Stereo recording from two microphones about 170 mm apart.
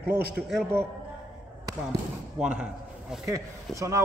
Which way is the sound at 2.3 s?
5° right (ahead or behind).